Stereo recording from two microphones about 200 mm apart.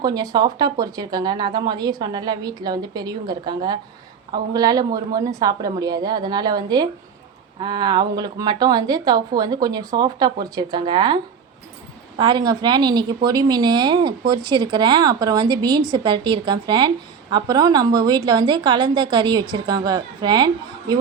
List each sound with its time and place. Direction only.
0.0 s speech: 20° right (ahead or behind)